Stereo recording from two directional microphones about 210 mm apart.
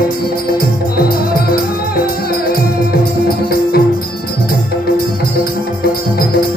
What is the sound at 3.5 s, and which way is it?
Music, 45° left (ahead or behind).